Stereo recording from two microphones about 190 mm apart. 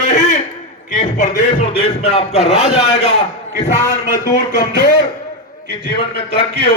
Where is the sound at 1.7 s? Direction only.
30° left (ahead or behind).